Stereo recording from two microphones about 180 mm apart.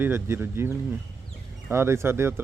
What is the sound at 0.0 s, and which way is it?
Speech, 15° right (ahead or behind).